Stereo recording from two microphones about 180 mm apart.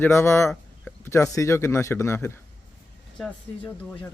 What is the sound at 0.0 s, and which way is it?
Speech, 15° left (ahead or behind).